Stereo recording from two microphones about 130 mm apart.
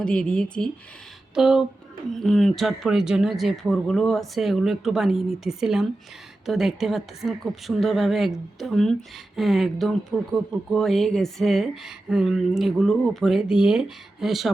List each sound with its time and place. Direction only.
0.0 s speech: 5° left (ahead or behind)
1.4 s speech: 5° right (ahead or behind)